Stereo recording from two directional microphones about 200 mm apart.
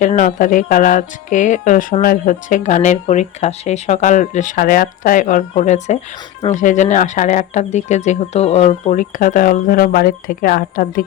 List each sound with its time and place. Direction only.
0.0 s speech: 40° left (ahead or behind)